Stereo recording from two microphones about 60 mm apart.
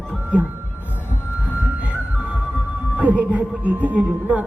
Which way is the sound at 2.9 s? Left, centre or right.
Right.